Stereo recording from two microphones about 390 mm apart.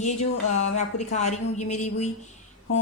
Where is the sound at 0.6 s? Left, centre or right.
Centre.